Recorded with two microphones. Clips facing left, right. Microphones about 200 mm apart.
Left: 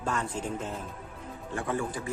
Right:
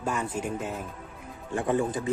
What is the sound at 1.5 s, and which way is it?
Speech, 20° right (ahead or behind).